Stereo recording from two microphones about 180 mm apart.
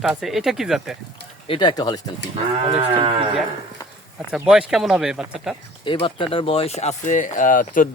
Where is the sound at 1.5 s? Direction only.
25° left (ahead or behind).